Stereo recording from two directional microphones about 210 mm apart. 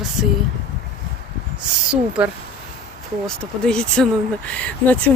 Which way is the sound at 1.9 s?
5° right (ahead or behind).